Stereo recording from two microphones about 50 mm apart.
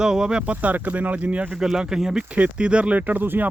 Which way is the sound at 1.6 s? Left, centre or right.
Centre.